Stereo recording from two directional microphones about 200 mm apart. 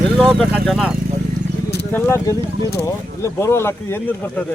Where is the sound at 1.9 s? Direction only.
10° left (ahead or behind).